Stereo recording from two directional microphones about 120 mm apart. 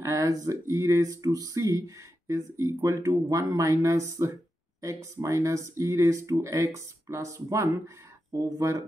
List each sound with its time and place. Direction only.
0.0 s speech: 25° right (ahead or behind)